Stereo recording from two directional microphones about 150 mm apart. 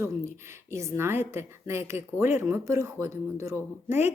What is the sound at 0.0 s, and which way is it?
A woman's voice, 15° right (ahead or behind).